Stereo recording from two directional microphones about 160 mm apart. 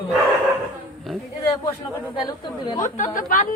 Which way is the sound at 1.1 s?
Centre (ahead or behind).